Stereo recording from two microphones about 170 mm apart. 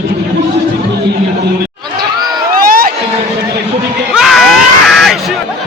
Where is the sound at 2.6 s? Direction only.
60° right (ahead or behind).